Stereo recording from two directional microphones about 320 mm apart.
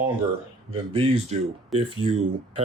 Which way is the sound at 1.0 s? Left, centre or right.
Centre.